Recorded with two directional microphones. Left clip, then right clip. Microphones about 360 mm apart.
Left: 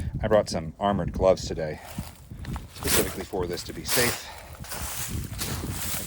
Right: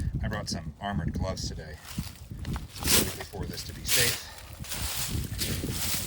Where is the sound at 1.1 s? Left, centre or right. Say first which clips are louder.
Left 14 dB; centre.